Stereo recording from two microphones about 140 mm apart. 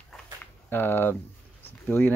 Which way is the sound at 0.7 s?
15° left (ahead or behind).